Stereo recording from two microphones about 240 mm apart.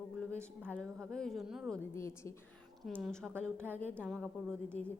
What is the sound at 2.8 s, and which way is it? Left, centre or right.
A woman's voice, centre.